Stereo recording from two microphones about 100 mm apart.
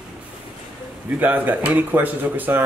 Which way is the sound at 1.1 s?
15° right (ahead or behind).